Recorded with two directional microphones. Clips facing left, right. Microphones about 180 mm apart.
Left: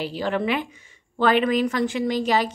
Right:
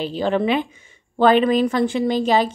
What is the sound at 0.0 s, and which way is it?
A woman's voice, 25° right (ahead or behind).